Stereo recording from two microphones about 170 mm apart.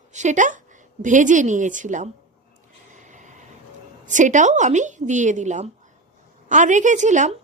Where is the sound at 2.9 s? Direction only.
45° right (ahead or behind).